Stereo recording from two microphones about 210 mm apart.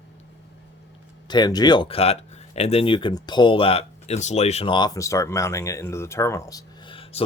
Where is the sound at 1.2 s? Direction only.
20° left (ahead or behind).